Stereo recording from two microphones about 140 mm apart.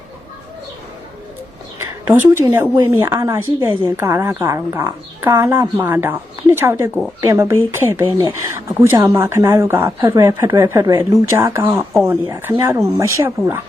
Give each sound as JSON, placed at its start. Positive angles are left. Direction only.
{"t": 1.8, "sound": "a woman's voice", "side_deg": -20}